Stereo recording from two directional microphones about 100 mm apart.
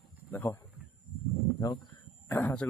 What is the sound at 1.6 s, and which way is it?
Speech, 40° left (ahead or behind).